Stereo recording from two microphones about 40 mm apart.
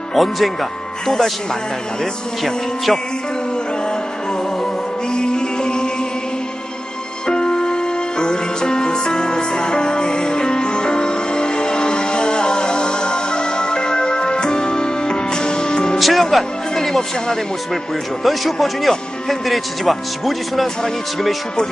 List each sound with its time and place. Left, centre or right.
0.1 s speech: centre
2.4 s speech: centre
5.1 s music: left
7.2 s music: centre
16.0 s speech: centre